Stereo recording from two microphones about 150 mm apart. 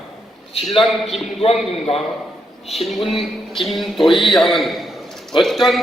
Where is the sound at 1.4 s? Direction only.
40° left (ahead or behind).